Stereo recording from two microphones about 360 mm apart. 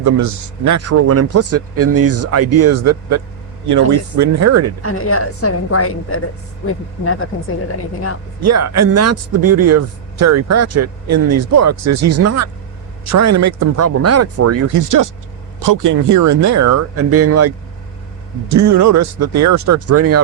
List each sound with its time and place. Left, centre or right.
0.0 s speech: right
4.8 s a woman's voice: left
8.4 s speech: right